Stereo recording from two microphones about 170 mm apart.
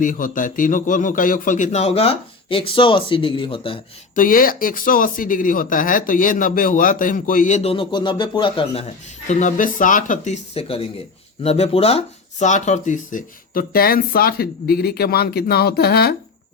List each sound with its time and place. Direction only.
0.0 s a man's voice: 50° left (ahead or behind); by 3.8 s 30° left (ahead or behind)
4.1 s speech: 55° left (ahead or behind)